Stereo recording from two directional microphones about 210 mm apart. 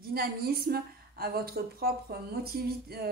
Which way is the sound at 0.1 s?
45° right (ahead or behind).